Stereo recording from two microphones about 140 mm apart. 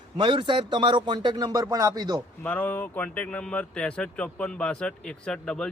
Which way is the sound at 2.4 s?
10° left (ahead or behind).